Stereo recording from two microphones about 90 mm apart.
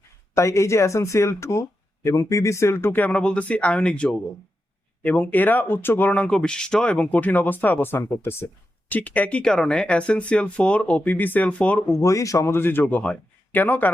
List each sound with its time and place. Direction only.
0.3 s speech: 35° left (ahead or behind)
8.9 s speech: 15° left (ahead or behind)
11.9 s speech: 35° left (ahead or behind)
12.5 s speech: 25° left (ahead or behind)